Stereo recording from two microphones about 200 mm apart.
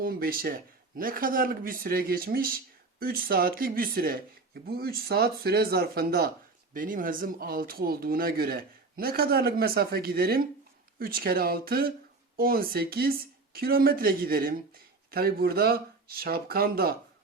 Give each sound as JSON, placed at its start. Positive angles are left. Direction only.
{"t": 0.0, "sound": "speech", "side_deg": -45}